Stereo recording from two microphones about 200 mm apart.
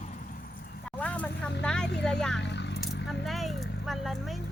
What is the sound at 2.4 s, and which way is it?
Vehicle, 60° left (ahead or behind).